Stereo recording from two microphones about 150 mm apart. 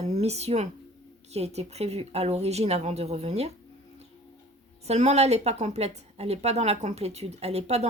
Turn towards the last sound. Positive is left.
turn(degrees=-45)  # may be behind; listen again after turning